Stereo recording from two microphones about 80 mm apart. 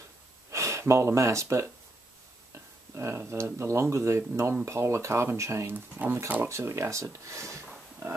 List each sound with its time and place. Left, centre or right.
0.5 s speech: right
3.0 s speech: right
5.9 s speech: right